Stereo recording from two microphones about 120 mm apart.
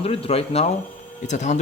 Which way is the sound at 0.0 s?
55° left (ahead or behind).